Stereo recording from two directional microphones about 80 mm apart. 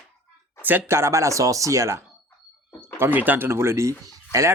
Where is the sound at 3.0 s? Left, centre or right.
Right.